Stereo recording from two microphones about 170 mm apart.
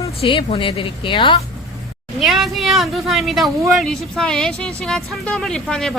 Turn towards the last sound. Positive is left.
turn(degrees=0)  # may be behind; listen again after turning